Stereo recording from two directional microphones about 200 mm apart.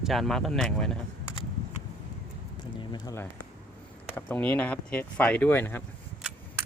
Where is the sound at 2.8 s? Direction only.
20° left (ahead or behind).